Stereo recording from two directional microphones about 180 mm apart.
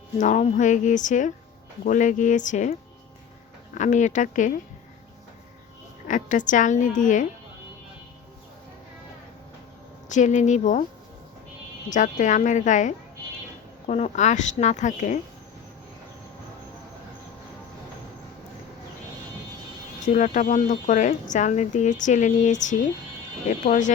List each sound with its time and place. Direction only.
0.2 s speech: 40° left (ahead or behind)
3.8 s speech: 45° left (ahead or behind)
6.1 s speech: 45° left (ahead or behind)
10.1 s speech: 40° left (ahead or behind)
11.9 s speech: 45° left (ahead or behind)
20.1 s speech: 45° left (ahead or behind)